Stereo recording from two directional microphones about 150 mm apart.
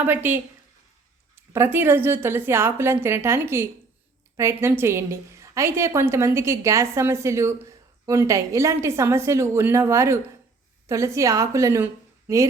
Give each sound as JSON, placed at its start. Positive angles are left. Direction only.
{"t": 0.0, "sound": "a woman's voice", "side_deg": -15}